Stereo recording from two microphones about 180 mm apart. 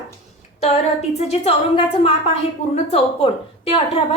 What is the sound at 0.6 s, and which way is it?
A woman's voice, 35° left (ahead or behind).